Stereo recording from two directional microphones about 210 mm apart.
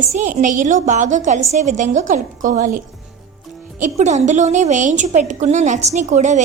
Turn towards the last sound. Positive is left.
turn(degrees=-35)  # may be behind; listen again after turning